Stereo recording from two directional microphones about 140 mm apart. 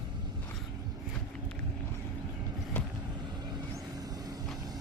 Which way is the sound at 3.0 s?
30° right (ahead or behind).